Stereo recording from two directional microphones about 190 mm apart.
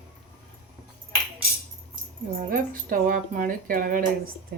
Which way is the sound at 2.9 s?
45° right (ahead or behind).